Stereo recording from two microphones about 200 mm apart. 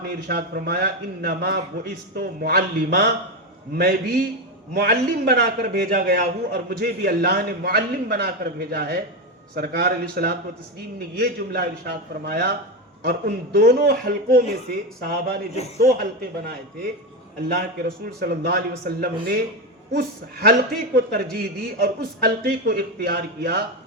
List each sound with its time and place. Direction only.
0.0 s a man's voice: 55° right (ahead or behind)